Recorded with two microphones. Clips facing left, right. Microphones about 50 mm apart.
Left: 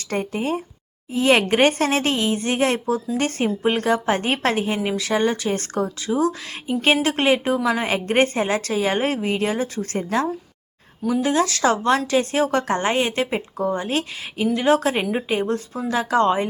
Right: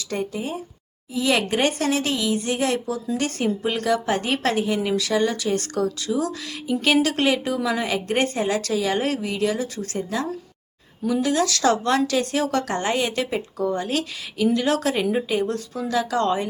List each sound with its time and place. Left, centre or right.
0.0 s speech: left
1.1 s a woman's voice: left
11.1 s speech: left